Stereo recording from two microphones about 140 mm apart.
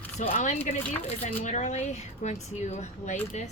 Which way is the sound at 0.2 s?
60° left (ahead or behind).